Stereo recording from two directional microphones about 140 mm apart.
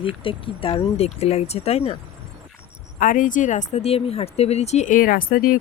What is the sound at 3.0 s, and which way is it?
Speech, 70° left (ahead or behind).